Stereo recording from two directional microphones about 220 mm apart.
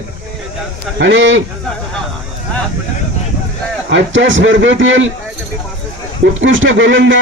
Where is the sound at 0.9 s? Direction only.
55° right (ahead or behind).